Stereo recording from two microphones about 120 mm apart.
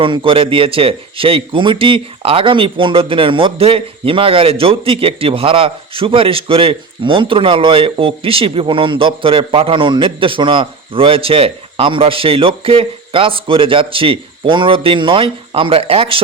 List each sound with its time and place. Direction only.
0.0 s speech: 45° right (ahead or behind)